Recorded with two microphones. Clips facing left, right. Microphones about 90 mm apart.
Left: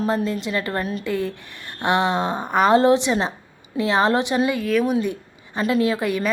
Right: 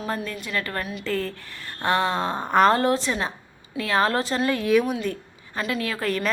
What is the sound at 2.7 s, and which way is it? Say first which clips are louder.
A woman's voice: left 6 dB; 20° left (ahead or behind).